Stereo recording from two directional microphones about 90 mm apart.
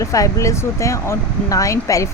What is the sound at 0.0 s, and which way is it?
Speech, 35° left (ahead or behind).